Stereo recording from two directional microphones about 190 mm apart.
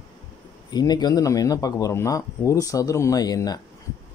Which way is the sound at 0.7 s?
20° left (ahead or behind).